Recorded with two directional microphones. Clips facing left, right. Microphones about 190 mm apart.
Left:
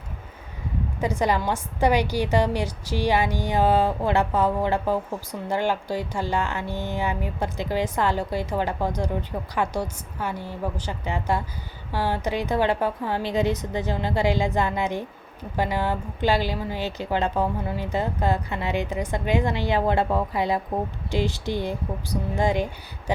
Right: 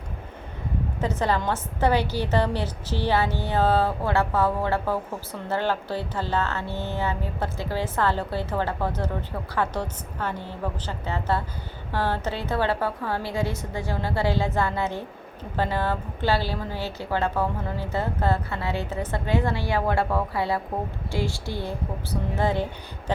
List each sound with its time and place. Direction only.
1.0 s a woman's voice: 15° left (ahead or behind)